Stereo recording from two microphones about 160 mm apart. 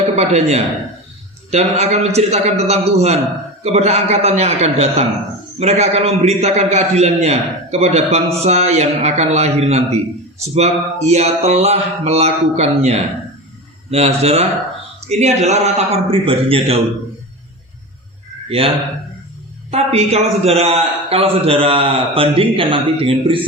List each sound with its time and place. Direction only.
0.2 s a man's voice: 40° right (ahead or behind)
18.4 s speech: 35° right (ahead or behind)
19.7 s a man's voice: 40° right (ahead or behind)